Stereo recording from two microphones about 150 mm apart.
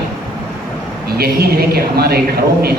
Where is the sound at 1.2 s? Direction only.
90° right.